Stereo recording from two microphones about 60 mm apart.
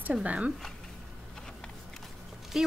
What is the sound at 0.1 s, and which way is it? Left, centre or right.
Speech, right.